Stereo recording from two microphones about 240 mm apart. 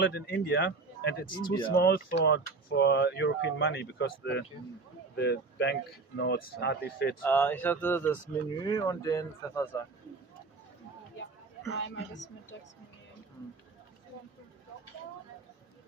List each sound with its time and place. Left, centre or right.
0.0 s speech: left
1.3 s speech: centre
1.7 s speech: left
7.2 s speech: centre
11.7 s speech: left